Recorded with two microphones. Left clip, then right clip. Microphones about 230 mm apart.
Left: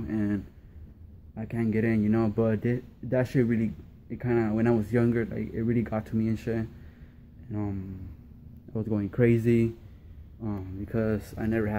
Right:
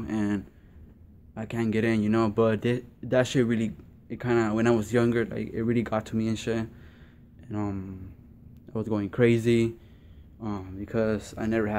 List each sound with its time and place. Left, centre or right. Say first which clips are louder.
0.0 s a sound: right 1 dB; centre
1.3 s speech: right 1 dB; centre
7.5 s speech: right 2 dB; centre
8.7 s speech: right 2 dB; centre